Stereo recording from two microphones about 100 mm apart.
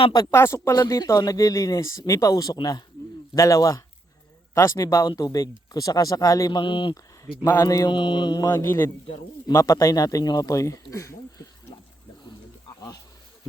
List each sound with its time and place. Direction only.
0.3 s speech: 25° left (ahead or behind); by 2.8 s 45° left (ahead or behind)
3.3 s speech: 35° left (ahead or behind)
6.6 s speech: 60° left (ahead or behind)
7.6 s speech: 35° left (ahead or behind)
7.9 s mantra: 50° left (ahead or behind)
8.6 s speech: 20° left (ahead or behind)
9.5 s speech: 35° left (ahead or behind)